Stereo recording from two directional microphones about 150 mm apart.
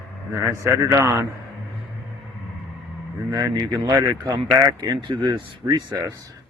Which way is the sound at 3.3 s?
25° right (ahead or behind).